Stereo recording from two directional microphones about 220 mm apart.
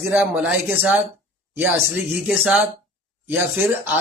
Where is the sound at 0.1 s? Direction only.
5° right (ahead or behind).